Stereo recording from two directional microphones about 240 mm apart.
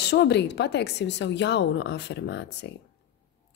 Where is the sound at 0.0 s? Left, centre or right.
Left.